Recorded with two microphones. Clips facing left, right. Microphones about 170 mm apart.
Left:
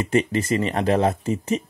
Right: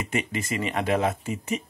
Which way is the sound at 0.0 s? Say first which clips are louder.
Left 8 dB; 35° left (ahead or behind).